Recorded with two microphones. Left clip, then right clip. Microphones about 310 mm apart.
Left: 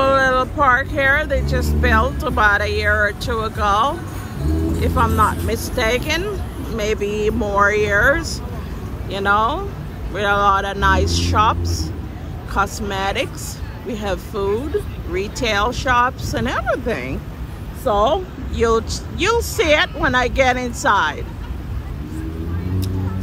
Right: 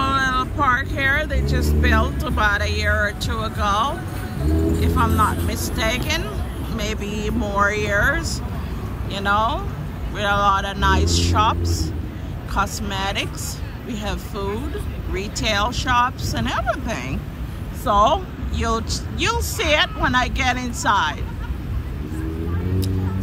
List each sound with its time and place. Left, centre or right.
0.0 s speech: centre
18.7 s speech: centre